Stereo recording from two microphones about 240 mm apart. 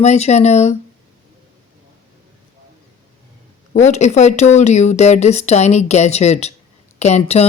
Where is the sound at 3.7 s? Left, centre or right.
Left.